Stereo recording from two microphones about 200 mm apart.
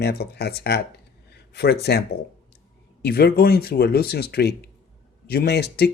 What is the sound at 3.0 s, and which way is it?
Speech, 55° left (ahead or behind).